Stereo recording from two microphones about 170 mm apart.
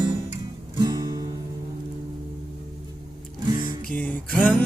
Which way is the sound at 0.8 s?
20° right (ahead or behind).